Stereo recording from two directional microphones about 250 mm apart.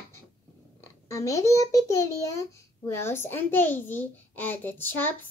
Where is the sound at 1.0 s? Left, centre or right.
Centre.